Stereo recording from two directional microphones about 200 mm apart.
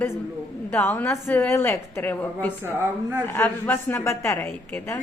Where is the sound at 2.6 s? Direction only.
10° right (ahead or behind).